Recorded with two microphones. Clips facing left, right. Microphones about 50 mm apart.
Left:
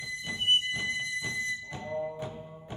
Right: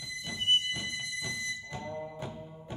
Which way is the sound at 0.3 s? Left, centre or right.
Left.